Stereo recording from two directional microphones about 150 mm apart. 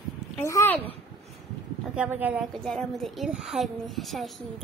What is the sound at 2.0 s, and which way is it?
Speech, 10° right (ahead or behind).